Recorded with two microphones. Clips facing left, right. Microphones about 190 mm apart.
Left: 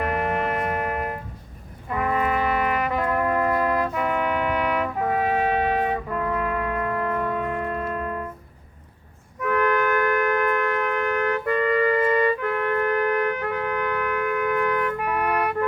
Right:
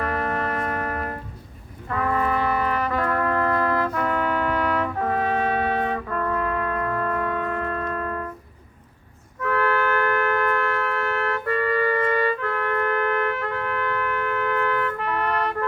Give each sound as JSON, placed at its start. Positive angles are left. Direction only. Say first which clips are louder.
{"t": 0.0, "sound": "music", "louder": "left 1 dB", "side_deg": 15}
{"t": 1.9, "sound": "trumpet", "louder": "even", "side_deg": 15}
{"t": 9.4, "sound": "wind instrument", "louder": "left 1 dB", "side_deg": 15}